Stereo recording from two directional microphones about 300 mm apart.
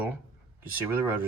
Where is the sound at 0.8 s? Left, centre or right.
Centre.